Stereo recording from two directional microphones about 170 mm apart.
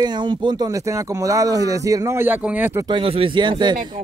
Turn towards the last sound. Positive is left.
turn(degrees=-25)  # may be behind; listen again after turning